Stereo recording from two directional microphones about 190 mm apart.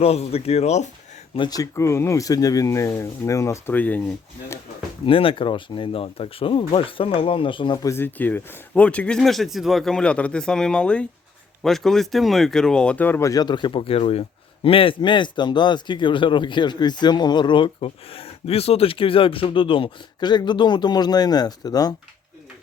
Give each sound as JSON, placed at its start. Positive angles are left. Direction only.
{"t": 0.0, "sound": "speech", "side_deg": 30}
{"t": 1.4, "sound": "speech", "side_deg": 20}
{"t": 5.0, "sound": "speech", "side_deg": 25}